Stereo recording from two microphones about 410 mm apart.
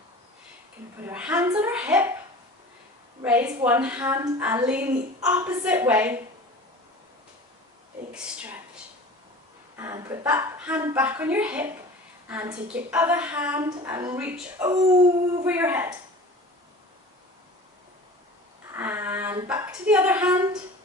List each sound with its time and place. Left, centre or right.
1.0 s a woman's voice: centre
3.2 s a woman's voice: centre
8.1 s a sound: centre
9.7 s a woman's voice: centre
18.7 s a woman's voice: centre